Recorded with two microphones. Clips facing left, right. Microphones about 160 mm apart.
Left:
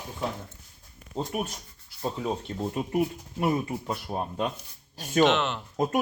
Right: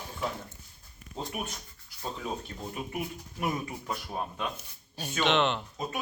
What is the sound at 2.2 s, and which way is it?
Speech, 30° left (ahead or behind).